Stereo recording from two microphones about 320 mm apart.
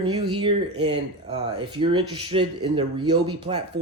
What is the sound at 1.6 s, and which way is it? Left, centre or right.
Speech, centre.